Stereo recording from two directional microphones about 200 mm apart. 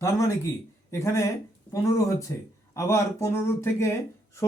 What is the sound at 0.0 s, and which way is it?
Speech, 15° left (ahead or behind).